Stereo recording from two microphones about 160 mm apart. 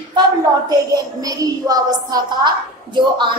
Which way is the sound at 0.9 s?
20° right (ahead or behind).